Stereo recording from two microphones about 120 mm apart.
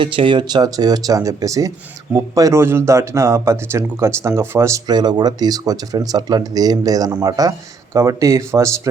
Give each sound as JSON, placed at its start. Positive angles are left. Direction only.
{"t": 0.0, "sound": "speech", "side_deg": -45}
{"t": 4.9, "sound": "speech", "side_deg": -35}